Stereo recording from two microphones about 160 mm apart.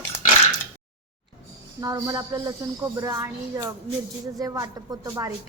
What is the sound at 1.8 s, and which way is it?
A woman's voice, 20° right (ahead or behind).